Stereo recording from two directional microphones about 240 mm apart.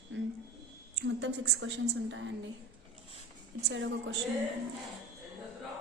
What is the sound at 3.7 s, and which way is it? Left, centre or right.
Speech, right.